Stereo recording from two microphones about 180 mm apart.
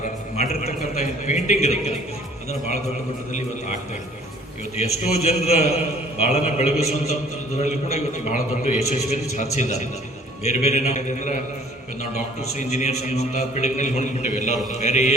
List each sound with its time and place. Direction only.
0.0 s a man's voice: 40° left (ahead or behind)
4.8 s a man's voice: 35° left (ahead or behind)